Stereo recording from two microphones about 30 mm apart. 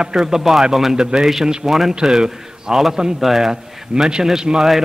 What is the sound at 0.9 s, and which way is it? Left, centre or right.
Speech, right.